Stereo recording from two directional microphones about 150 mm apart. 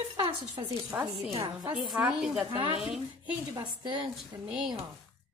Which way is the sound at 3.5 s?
30° right (ahead or behind).